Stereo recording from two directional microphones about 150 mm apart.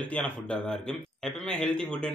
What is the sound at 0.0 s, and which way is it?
A man's voice, 10° left (ahead or behind).